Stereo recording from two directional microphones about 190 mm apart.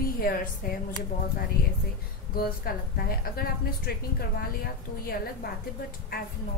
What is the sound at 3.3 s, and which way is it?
Speech, 50° left (ahead or behind).